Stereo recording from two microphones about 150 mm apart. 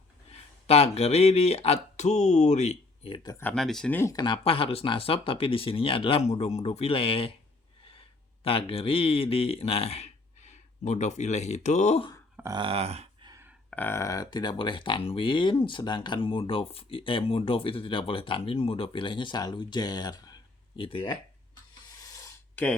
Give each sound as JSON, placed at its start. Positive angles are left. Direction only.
{"t": 0.7, "sound": "speech", "side_deg": 45}
{"t": 3.2, "sound": "speech", "side_deg": 15}
{"t": 3.5, "sound": "speech", "side_deg": 5}
{"t": 3.9, "sound": "speech", "side_deg": 20}
{"t": 8.4, "sound": "speech", "side_deg": 40}
{"t": 12.5, "sound": "a sound", "side_deg": -40}
{"t": 13.2, "sound": "a sound", "side_deg": -20}
{"t": 13.7, "sound": "speech", "side_deg": 15}
{"t": 21.9, "sound": "a sound", "side_deg": 20}